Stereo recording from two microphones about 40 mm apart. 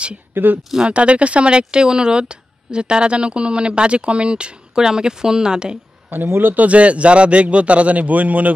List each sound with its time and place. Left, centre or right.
0.3 s speech: right
0.8 s speech: right
6.0 s speech: right
6.5 s a man's voice: right